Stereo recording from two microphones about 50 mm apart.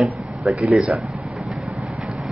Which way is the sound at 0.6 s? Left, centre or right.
Centre.